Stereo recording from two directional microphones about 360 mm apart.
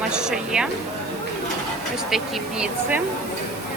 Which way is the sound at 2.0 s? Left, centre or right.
Centre.